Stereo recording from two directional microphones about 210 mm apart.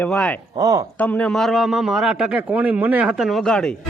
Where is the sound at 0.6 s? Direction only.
15° right (ahead or behind).